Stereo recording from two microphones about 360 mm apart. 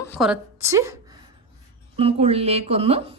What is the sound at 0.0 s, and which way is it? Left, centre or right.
Speech, centre.